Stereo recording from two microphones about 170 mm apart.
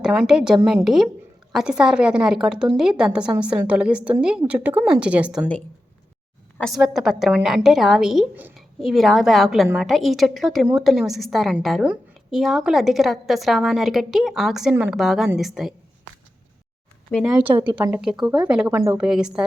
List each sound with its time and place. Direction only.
0.0 s a woman's voice: centre (ahead or behind)
6.7 s a woman's voice: 5° right (ahead or behind)
17.1 s speech: 5° left (ahead or behind)
17.3 s a woman's voice: 10° right (ahead or behind)
17.7 s a woman's voice: 25° right (ahead or behind)
17.9 s a woman's voice: 5° right (ahead or behind)